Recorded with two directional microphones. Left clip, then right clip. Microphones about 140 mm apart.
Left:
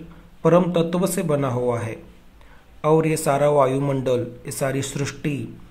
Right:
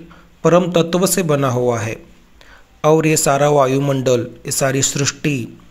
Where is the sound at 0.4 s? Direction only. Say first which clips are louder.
Right 4 dB; 25° right (ahead or behind).